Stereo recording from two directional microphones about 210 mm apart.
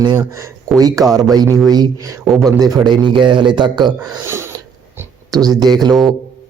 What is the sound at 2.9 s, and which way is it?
Speech, centre (ahead or behind).